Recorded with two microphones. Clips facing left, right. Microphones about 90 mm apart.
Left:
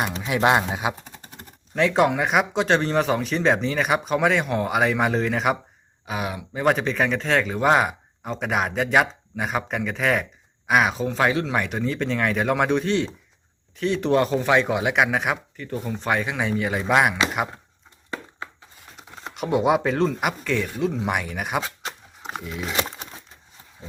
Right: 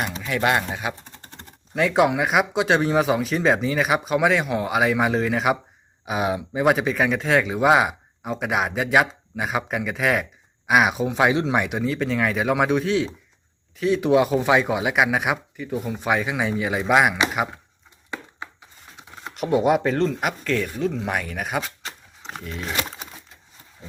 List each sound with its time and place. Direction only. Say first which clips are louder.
0.2 s speech: left 2 dB; 20° left (ahead or behind)
1.7 s speech: even; 5° right (ahead or behind)
6.1 s speech: right 5 dB; 20° right (ahead or behind)
6.5 s speech: even; 5° right (ahead or behind)
19.1 s speech: right 2 dB; centre (ahead or behind)